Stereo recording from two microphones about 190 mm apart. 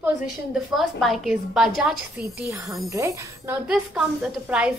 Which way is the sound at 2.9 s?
15° right (ahead or behind).